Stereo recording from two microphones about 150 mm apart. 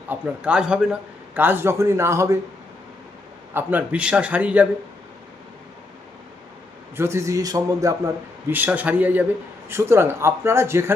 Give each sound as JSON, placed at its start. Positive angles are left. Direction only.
{"t": 0.1, "sound": "a man's voice", "side_deg": -10}
{"t": 3.5, "sound": "a man's voice", "side_deg": -15}
{"t": 6.9, "sound": "a man's voice", "side_deg": -15}